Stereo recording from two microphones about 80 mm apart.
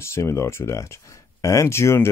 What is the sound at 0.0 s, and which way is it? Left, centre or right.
Speech, left.